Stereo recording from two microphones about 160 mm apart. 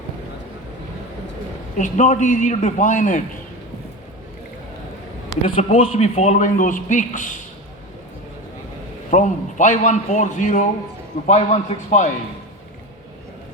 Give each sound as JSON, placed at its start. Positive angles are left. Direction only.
{"t": 1.8, "sound": "a man's voice", "side_deg": 50}
{"t": 5.4, "sound": "a man's voice", "side_deg": 50}
{"t": 9.0, "sound": "a man's voice", "side_deg": 50}
{"t": 11.3, "sound": "a man's voice", "side_deg": 40}